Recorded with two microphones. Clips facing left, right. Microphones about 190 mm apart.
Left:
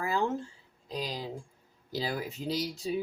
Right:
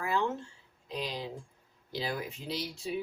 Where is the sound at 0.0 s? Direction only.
35° left (ahead or behind).